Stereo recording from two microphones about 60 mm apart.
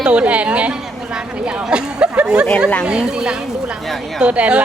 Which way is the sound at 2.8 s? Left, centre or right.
Centre.